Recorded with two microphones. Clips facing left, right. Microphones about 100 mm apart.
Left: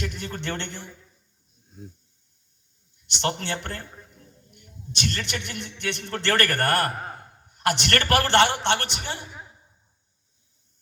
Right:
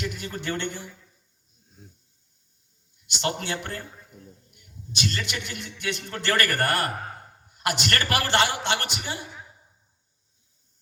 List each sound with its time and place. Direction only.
0.0 s a man's voice: 55° left (ahead or behind)
3.2 s a man's voice: 55° left (ahead or behind)